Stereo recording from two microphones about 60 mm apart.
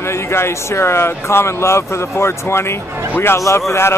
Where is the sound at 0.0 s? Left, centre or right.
Left.